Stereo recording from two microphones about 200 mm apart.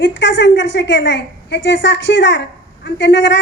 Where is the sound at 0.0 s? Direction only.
60° left (ahead or behind).